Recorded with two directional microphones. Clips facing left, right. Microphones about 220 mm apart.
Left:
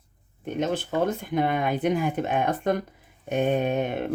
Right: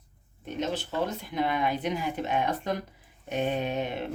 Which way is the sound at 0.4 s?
55° left (ahead or behind).